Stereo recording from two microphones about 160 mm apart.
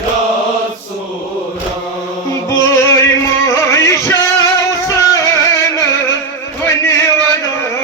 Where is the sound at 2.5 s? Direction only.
15° left (ahead or behind).